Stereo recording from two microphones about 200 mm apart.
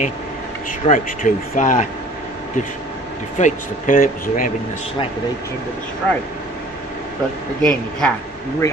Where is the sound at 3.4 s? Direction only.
40° left (ahead or behind).